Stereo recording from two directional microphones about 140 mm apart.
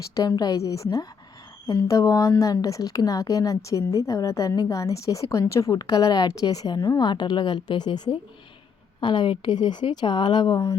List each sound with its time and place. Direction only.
0.1 s a woman's voice: 30° left (ahead or behind)